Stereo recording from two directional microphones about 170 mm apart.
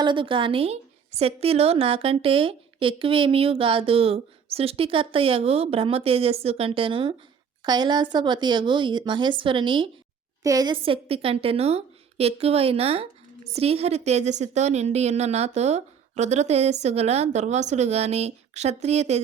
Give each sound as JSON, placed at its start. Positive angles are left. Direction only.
{"t": 0.0, "sound": "a woman's voice", "side_deg": -30}